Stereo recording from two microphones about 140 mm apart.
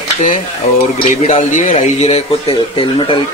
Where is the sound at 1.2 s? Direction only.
60° left (ahead or behind).